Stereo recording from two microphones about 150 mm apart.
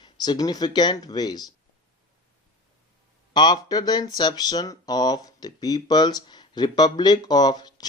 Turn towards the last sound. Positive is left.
turn(degrees=25)  # may be behind; listen again after turning